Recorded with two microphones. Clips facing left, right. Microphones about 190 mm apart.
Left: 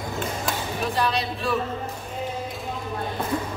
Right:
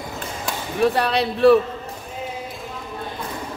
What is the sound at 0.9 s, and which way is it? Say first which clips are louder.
Speech: right 4 dB; 65° right (ahead or behind).